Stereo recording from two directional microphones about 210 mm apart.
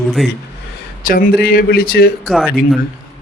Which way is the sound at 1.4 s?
45° left (ahead or behind).